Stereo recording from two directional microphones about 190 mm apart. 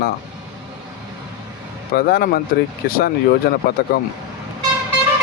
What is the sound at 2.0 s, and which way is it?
Speech, 55° left (ahead or behind).